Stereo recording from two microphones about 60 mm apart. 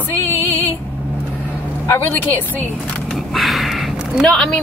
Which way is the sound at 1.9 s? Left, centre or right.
Left.